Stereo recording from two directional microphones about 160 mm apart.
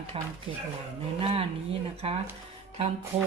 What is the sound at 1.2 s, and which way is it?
Speech, 40° right (ahead or behind).